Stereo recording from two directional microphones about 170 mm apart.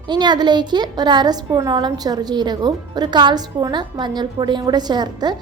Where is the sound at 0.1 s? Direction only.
25° right (ahead or behind).